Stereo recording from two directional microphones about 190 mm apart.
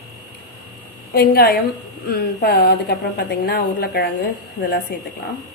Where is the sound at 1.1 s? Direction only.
55° left (ahead or behind).